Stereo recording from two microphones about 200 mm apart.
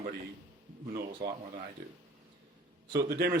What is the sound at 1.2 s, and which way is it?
Speech, 55° right (ahead or behind).